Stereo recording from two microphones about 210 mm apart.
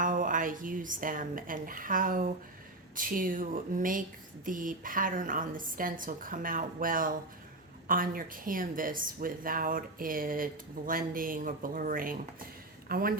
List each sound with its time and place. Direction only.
0.0 s speech: 40° right (ahead or behind)